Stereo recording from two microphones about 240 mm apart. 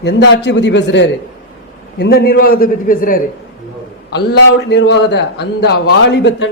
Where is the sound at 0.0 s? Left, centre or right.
Left.